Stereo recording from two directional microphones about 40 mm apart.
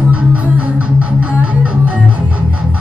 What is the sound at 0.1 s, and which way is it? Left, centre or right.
Music, right.